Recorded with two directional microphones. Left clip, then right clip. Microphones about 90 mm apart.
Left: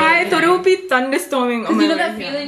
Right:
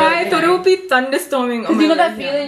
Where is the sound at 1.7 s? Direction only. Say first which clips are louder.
Right 6 dB; 20° right (ahead or behind).